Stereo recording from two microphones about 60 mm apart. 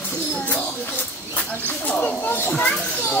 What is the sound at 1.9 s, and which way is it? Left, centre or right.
Speech, left.